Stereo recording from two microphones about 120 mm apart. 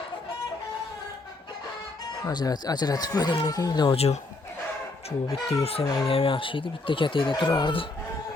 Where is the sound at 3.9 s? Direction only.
60° left (ahead or behind).